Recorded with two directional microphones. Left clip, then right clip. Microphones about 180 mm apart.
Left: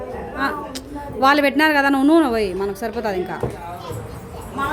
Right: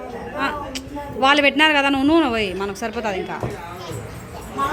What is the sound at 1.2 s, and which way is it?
A woman's voice, 30° left (ahead or behind).